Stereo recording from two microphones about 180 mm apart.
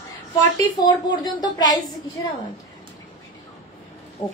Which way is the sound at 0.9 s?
20° left (ahead or behind).